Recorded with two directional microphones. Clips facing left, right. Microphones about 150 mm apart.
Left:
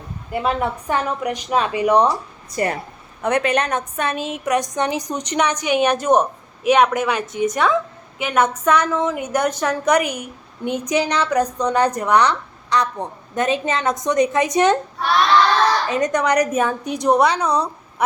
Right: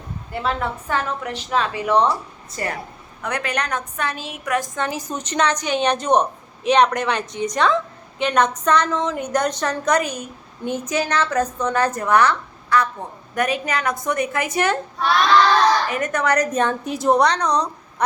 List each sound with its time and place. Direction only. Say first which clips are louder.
0.3 s a woman's voice: left 3 dB; 15° left (ahead or behind)
15.9 s a woman's voice: left 3 dB; 20° left (ahead or behind)